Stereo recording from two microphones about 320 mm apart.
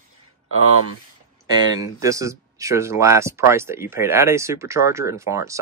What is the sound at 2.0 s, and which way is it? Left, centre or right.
Speech, centre.